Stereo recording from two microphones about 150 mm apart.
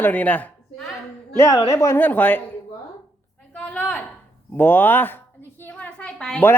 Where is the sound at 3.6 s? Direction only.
10° left (ahead or behind).